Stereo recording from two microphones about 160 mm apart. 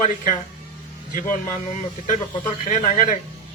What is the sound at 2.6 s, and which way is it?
Speech, 50° left (ahead or behind).